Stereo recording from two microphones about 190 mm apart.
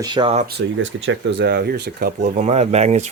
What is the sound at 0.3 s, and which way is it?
Speech, 50° right (ahead or behind).